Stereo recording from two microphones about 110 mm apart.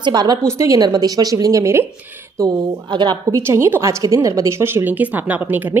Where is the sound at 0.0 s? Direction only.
40° right (ahead or behind).